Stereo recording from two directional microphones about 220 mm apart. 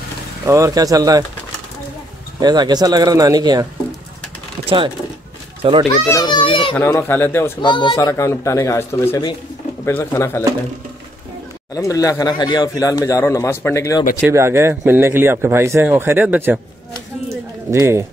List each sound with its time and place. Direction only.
0.5 s speech: 15° right (ahead or behind)
2.4 s speech: 20° right (ahead or behind)
4.6 s a child's voice: 25° right (ahead or behind)
6.0 s a child's voice: 20° left (ahead or behind)
6.7 s speech: 10° left (ahead or behind)
7.6 s speech: 20° left (ahead or behind)
11.7 s speech: 15° left (ahead or behind)
14.3 s speech: 10° right (ahead or behind)
17.6 s speech: 10° right (ahead or behind)